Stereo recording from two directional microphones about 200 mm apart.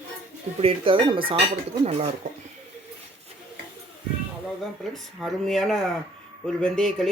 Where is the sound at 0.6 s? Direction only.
25° right (ahead or behind).